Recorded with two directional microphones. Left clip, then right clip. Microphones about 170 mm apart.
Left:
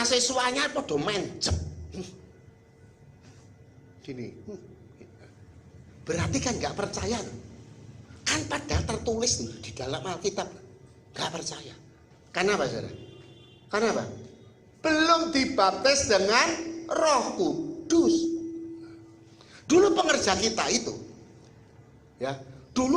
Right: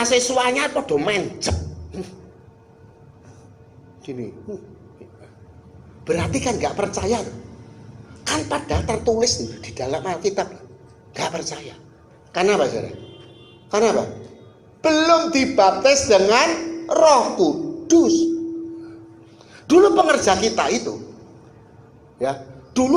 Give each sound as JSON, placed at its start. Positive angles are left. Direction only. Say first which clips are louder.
{"t": 0.3, "sound": "speech", "louder": "right 7 dB", "side_deg": 25}
{"t": 4.0, "sound": "speech", "louder": "right 8 dB", "side_deg": 25}
{"t": 6.1, "sound": "a man's voice", "louder": "right 8 dB", "side_deg": 20}
{"t": 19.5, "sound": "speech", "louder": "right 8 dB", "side_deg": 20}
{"t": 22.2, "sound": "a man's voice", "louder": "right 9 dB", "side_deg": 20}